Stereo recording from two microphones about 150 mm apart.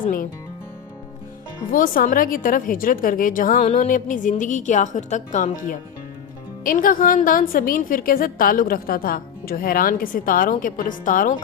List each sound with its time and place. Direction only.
0.0 s music: 65° left (ahead or behind)
1.7 s a woman's voice: 65° left (ahead or behind)
3.6 s a woman's voice: 55° left (ahead or behind)
6.7 s a woman's voice: 65° left (ahead or behind)